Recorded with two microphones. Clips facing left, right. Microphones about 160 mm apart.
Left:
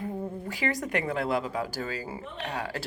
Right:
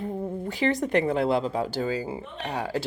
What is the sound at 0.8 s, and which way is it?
Speech, 25° right (ahead or behind).